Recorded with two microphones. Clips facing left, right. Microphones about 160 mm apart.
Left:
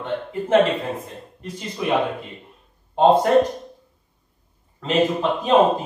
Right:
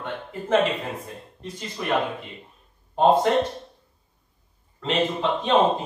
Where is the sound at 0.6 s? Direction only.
35° left (ahead or behind).